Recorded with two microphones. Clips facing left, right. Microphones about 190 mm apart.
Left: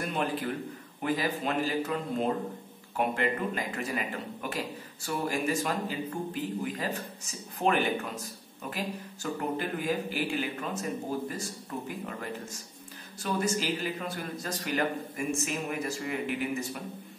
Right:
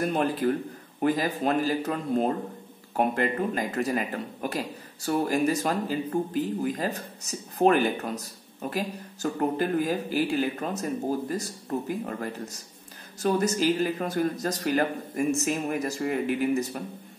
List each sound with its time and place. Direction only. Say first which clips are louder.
0.0 s a man's voice: right 6 dB; 40° right (ahead or behind)
13.2 s a man's voice: right 6 dB; 40° right (ahead or behind)